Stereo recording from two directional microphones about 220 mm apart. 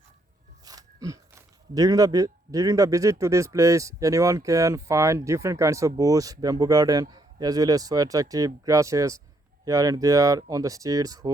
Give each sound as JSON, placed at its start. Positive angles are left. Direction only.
{"t": 0.6, "sound": "a man's voice", "side_deg": -15}